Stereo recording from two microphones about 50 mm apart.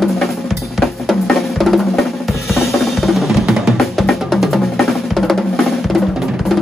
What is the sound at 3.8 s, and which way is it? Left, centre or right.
Music, centre.